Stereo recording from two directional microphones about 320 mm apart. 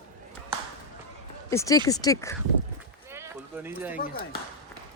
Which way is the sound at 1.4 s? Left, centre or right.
Centre.